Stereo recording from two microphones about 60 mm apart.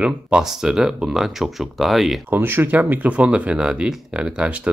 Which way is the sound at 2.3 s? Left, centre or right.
Right.